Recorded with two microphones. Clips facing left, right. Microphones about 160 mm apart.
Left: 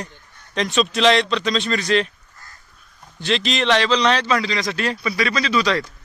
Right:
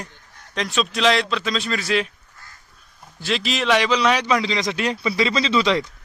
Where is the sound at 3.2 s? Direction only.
5° right (ahead or behind); by 5.8 s 20° right (ahead or behind).